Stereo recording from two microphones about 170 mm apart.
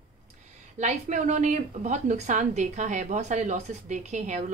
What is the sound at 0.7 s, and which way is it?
Speech, 45° right (ahead or behind).